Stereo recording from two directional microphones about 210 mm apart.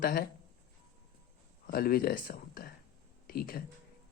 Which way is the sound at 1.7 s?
45° left (ahead or behind).